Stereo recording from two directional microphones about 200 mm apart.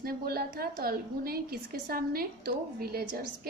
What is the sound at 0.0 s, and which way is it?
A woman's voice, 50° right (ahead or behind).